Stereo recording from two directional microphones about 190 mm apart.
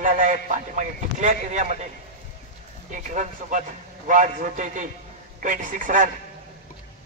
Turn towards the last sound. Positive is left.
turn(degrees=-45)  # may be behind; listen again after turning